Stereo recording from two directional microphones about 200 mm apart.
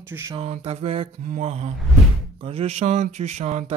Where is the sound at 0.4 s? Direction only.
30° right (ahead or behind).